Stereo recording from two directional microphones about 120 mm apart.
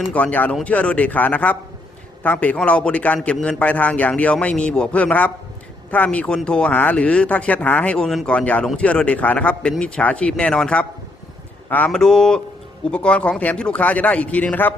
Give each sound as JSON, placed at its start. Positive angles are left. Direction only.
{"t": 0.1, "sound": "speech", "side_deg": 10}
{"t": 11.9, "sound": "speech", "side_deg": 5}